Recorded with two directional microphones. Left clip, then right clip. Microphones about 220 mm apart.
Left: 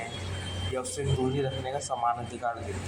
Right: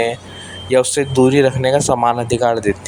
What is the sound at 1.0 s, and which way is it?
Speech, 55° right (ahead or behind).